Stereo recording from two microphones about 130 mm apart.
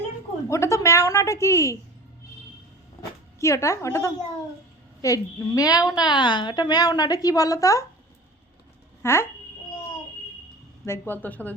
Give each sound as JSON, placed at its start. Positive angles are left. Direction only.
{"t": 0.4, "sound": "a woman's voice", "side_deg": 20}
{"t": 3.0, "sound": "a woman's voice", "side_deg": 20}
{"t": 9.0, "sound": "a woman's voice", "side_deg": 20}
{"t": 10.8, "sound": "a woman's voice", "side_deg": 20}